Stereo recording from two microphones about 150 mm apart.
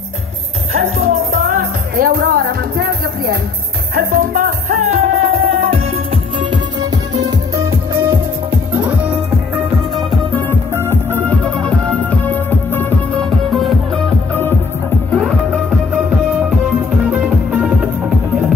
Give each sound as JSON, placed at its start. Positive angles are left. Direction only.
{"t": 0.7, "sound": "music", "side_deg": -80}
{"t": 3.9, "sound": "music", "side_deg": -70}
{"t": 6.5, "sound": "music", "side_deg": -25}
{"t": 8.0, "sound": "music", "side_deg": -15}
{"t": 10.3, "sound": "music", "side_deg": 15}
{"t": 13.5, "sound": "music", "side_deg": 0}
{"t": 15.0, "sound": "music", "side_deg": 5}
{"t": 17.1, "sound": "music", "side_deg": -5}